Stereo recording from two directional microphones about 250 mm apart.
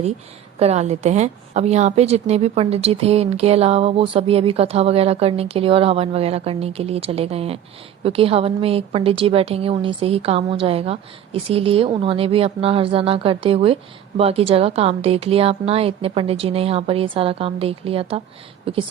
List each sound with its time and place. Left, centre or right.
0.6 s a woman's voice: right